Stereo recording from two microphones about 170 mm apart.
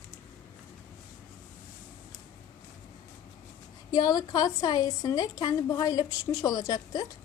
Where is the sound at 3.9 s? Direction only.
20° left (ahead or behind).